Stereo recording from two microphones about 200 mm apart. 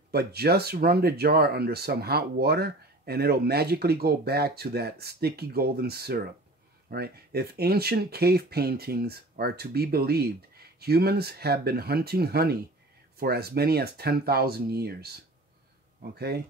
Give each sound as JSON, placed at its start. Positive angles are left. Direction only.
{"t": 0.1, "sound": "speech", "side_deg": -50}